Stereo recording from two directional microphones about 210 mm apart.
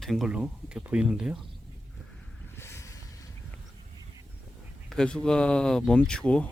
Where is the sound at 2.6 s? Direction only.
15° left (ahead or behind).